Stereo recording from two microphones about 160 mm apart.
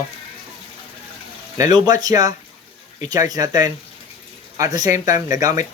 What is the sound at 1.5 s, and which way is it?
Speech, 25° right (ahead or behind).